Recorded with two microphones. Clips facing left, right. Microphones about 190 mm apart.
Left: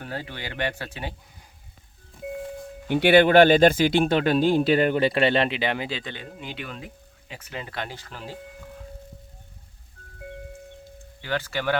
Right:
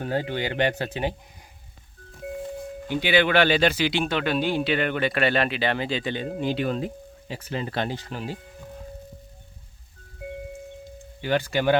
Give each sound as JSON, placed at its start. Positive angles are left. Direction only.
{"t": 0.0, "sound": "speech", "side_deg": -20}
{"t": 2.9, "sound": "speech", "side_deg": 60}
{"t": 3.2, "sound": "speech", "side_deg": 50}
{"t": 6.4, "sound": "speech", "side_deg": -35}
{"t": 7.9, "sound": "speech", "side_deg": -15}
{"t": 11.2, "sound": "speech", "side_deg": -15}